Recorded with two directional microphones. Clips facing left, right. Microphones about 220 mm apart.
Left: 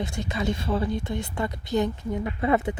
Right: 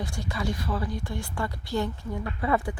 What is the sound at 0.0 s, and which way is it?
Speech, 20° left (ahead or behind).